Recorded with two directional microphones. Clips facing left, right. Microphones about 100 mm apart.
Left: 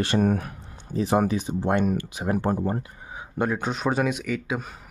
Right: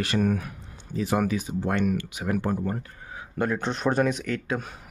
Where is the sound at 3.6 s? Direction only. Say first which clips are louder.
Right 1 dB; 5° left (ahead or behind).